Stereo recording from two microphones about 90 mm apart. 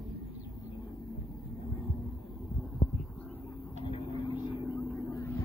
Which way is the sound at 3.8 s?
90° left.